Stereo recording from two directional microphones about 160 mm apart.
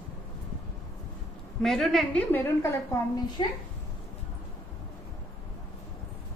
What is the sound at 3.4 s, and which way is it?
Speech, 30° left (ahead or behind).